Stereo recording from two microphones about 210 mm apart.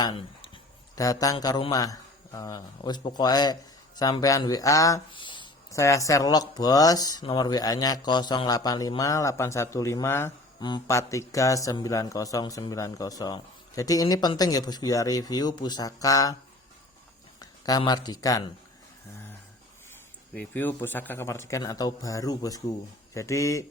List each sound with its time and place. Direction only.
0.0 s a man's voice: 25° left (ahead or behind)
17.4 s a man's voice: 20° left (ahead or behind)
20.3 s a man's voice: 5° left (ahead or behind)